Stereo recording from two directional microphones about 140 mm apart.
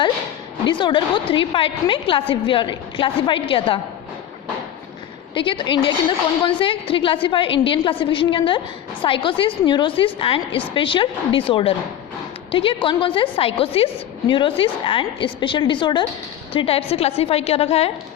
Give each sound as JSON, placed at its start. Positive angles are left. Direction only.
{"t": 0.7, "sound": "a woman's voice", "side_deg": 35}
{"t": 5.3, "sound": "a woman's voice", "side_deg": 35}